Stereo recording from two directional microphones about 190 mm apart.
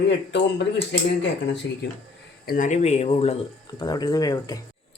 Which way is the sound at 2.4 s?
45° left (ahead or behind).